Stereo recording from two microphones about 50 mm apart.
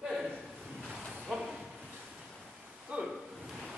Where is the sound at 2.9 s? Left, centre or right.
Right.